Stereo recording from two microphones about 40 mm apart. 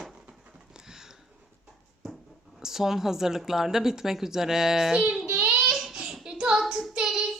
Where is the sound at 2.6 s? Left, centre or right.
Centre.